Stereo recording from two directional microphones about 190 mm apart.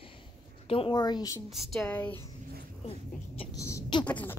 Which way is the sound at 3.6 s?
15° left (ahead or behind).